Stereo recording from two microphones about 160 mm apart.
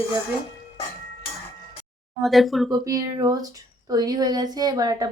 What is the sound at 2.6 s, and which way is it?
Speech, 25° right (ahead or behind).